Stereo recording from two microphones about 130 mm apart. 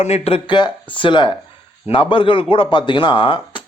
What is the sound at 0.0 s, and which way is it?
A man's voice, 50° left (ahead or behind).